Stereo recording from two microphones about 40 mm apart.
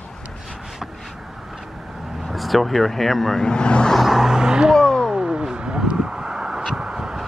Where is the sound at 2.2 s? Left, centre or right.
Centre.